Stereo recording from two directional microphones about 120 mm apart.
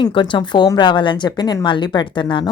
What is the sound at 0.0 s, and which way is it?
A woman's voice, 40° left (ahead or behind).